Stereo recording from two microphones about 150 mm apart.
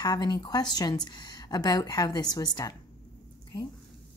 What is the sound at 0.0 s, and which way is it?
Speech, 25° left (ahead or behind).